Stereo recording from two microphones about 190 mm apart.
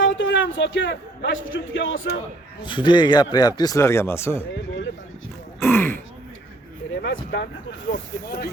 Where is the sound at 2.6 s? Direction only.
25° left (ahead or behind).